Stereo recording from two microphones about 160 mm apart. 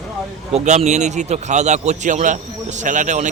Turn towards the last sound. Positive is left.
turn(degrees=-50)  # may be behind; listen again after turning